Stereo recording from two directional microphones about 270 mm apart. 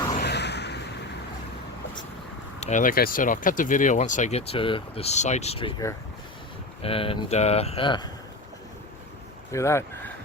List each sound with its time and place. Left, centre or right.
0.2 s a sound: left
2.6 s speech: left
9.5 s speech: centre